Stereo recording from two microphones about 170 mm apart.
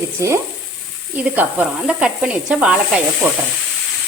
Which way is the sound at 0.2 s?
15° right (ahead or behind).